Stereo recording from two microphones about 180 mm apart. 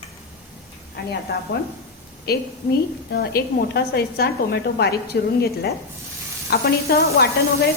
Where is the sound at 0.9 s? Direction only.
60° left (ahead or behind).